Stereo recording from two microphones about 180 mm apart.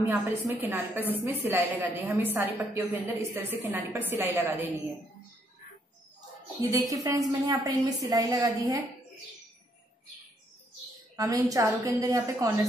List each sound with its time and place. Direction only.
0.0 s a woman's voice: 10° right (ahead or behind)
6.6 s a woman's voice: 20° right (ahead or behind)
11.1 s a woman's voice: 20° right (ahead or behind)